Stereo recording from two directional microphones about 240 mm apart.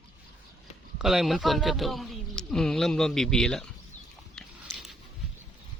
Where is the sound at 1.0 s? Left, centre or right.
Centre.